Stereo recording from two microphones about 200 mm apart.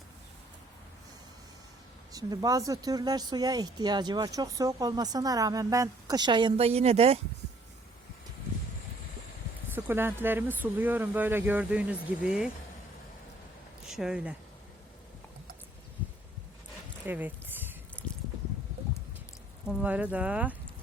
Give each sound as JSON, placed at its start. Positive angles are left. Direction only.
{"t": 2.1, "sound": "speech", "side_deg": -20}
{"t": 9.7, "sound": "speech", "side_deg": -10}
{"t": 13.8, "sound": "speech", "side_deg": 0}
{"t": 17.1, "sound": "a sound", "side_deg": -10}
{"t": 19.6, "sound": "speech", "side_deg": -5}